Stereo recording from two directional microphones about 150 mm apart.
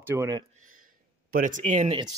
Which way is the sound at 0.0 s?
15° right (ahead or behind).